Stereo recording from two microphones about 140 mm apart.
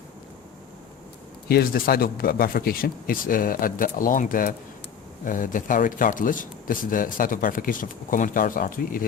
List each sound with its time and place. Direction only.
1.5 s speech: 90° left